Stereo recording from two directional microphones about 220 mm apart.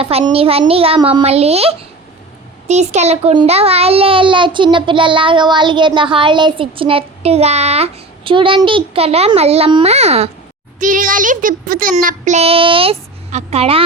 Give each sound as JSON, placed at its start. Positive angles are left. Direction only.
{"t": 0.0, "sound": "a child's voice", "side_deg": -25}